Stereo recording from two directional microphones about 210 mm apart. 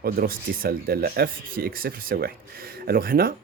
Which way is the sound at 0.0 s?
45° right (ahead or behind).